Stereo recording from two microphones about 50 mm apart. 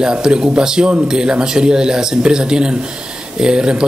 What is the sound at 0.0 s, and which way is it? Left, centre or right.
Speech, centre.